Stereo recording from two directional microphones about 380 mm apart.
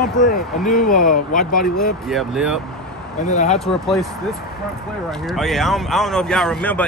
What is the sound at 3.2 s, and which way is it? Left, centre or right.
Speech, centre.